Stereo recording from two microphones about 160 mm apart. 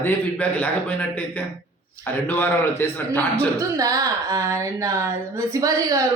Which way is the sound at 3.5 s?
20° right (ahead or behind).